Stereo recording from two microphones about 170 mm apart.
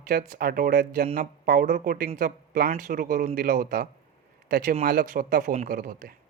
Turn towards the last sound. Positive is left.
turn(degrees=-55)  # may be behind; listen again after turning